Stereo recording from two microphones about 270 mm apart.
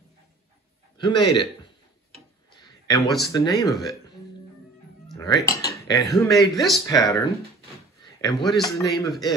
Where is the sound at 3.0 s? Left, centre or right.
Centre.